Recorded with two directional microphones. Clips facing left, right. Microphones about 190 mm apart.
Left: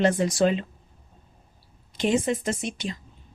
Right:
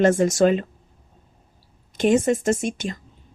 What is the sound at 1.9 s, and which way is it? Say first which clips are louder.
Speech: right 5 dB; 50° right (ahead or behind).